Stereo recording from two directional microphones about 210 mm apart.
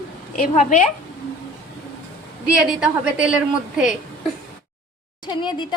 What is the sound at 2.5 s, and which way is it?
Speech, 5° right (ahead or behind).